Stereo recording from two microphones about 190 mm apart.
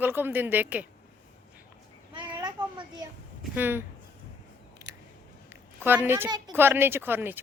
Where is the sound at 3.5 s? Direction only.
10° right (ahead or behind).